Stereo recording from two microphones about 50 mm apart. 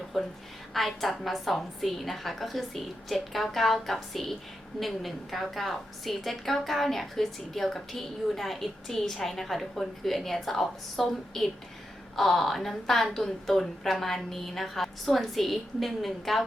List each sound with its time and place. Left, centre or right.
0.1 s a woman's voice: centre